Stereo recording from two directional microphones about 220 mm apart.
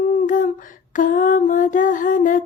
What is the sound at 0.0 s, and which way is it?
Humming, 35° left (ahead or behind).